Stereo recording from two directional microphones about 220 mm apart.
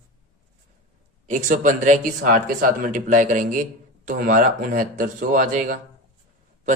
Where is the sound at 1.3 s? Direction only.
35° right (ahead or behind).